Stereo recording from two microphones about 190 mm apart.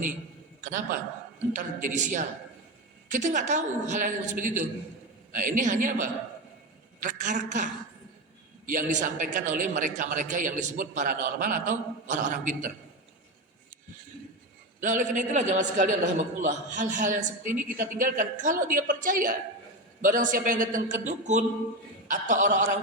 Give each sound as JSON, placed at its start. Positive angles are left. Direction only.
{"t": 0.6, "sound": "a man's voice", "side_deg": -45}
{"t": 14.8, "sound": "a woman's voice", "side_deg": -40}